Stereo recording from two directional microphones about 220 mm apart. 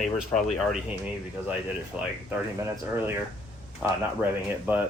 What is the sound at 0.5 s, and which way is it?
Speech, centre (ahead or behind).